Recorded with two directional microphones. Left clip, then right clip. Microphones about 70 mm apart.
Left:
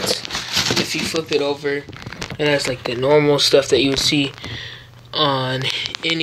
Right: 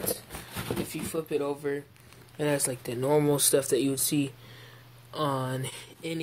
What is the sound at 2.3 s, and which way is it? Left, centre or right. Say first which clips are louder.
Speech: left 10 dB; right.